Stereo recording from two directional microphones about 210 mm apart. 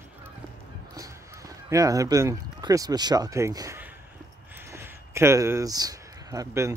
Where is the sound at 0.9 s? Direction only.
15° right (ahead or behind).